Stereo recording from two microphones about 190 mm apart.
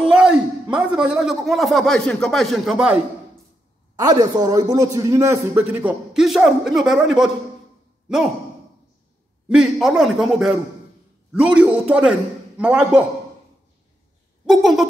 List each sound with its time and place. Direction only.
0.1 s a man's voice: 5° right (ahead or behind)
4.0 s a man's voice: 20° right (ahead or behind); by 7.2 s centre (ahead or behind)
9.5 s a man's voice: 5° right (ahead or behind)
14.4 s a man's voice: centre (ahead or behind)